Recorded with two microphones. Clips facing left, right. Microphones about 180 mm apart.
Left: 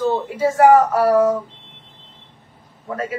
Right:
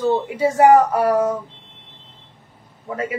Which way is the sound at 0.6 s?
20° right (ahead or behind).